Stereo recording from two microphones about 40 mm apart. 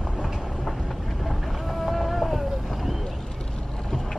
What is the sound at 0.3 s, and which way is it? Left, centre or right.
Train, centre.